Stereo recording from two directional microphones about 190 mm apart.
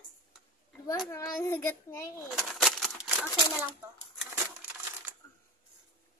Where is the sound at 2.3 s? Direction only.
Centre (ahead or behind).